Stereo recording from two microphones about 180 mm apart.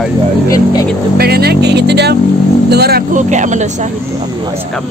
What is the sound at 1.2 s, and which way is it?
A man's voice, 60° right (ahead or behind).